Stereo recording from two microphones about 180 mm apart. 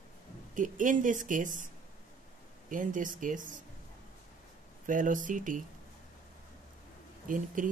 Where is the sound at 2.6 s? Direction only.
45° right (ahead or behind).